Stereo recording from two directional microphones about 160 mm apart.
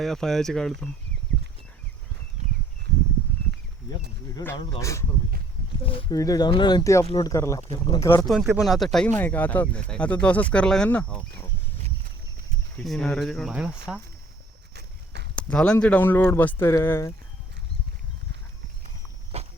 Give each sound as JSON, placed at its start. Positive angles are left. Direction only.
{"t": 0.0, "sound": "speech", "side_deg": 0}
{"t": 4.5, "sound": "speech", "side_deg": 30}
{"t": 4.8, "sound": "speech", "side_deg": 20}
{"t": 5.8, "sound": "speech", "side_deg": 35}
{"t": 6.1, "sound": "speech", "side_deg": 20}
{"t": 8.2, "sound": "speech", "side_deg": 0}
{"t": 12.8, "sound": "speech", "side_deg": 5}
{"t": 14.8, "sound": "clip-clop", "side_deg": -90}
{"t": 15.4, "sound": "speech", "side_deg": 5}
{"t": 19.3, "sound": "walk", "side_deg": -40}